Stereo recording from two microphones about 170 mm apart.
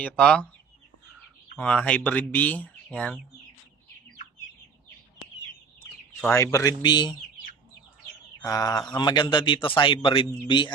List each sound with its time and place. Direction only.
0.0 s speech: 5° left (ahead or behind)
1.5 s speech: 5° left (ahead or behind)
6.2 s a man's voice: 15° left (ahead or behind)
8.4 s bird: 20° left (ahead or behind)
8.9 s a man's voice: 25° left (ahead or behind)